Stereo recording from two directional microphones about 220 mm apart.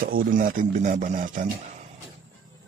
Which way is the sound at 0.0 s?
40° right (ahead or behind).